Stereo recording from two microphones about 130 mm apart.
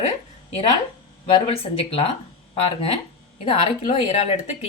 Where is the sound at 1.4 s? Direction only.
45° left (ahead or behind).